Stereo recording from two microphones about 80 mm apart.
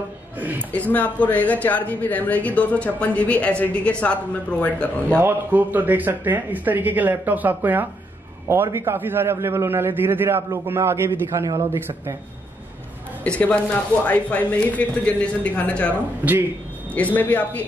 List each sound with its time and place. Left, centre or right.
0.4 s a woman's voice: right
0.7 s speech: centre
5.2 s a man's voice: right
13.4 s speech: centre
16.9 s speech: left